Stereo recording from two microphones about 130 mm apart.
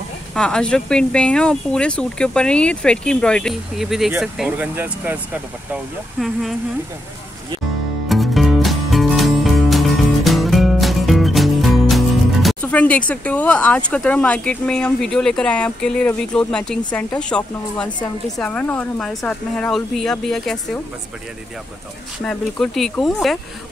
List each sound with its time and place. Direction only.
0.3 s speech: 5° left (ahead or behind); by 5.8 s 15° right (ahead or behind)
6.1 s speech: centre (ahead or behind)
8.1 s music: centre (ahead or behind)
12.7 s speech: 10° left (ahead or behind)
22.2 s speech: 5° left (ahead or behind)